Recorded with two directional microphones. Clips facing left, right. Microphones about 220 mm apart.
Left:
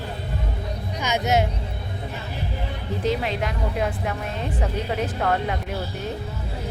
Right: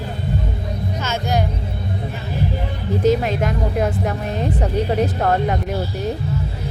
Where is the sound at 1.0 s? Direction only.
20° left (ahead or behind).